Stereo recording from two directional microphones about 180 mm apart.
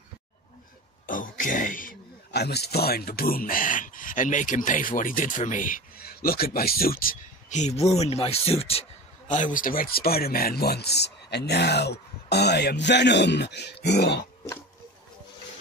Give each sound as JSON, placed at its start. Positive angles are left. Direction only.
{"t": 1.0, "sound": "speech", "side_deg": 50}
{"t": 9.3, "sound": "speech", "side_deg": 45}